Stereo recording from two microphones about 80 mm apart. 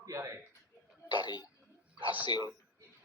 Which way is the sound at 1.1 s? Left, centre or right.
Left.